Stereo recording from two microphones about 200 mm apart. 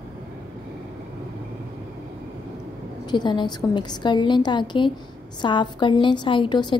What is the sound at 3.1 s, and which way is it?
A woman's voice, 20° left (ahead or behind).